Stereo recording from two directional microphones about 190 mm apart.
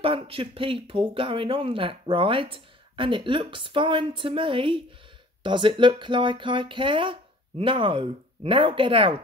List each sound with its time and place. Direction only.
0.0 s speech: 30° right (ahead or behind)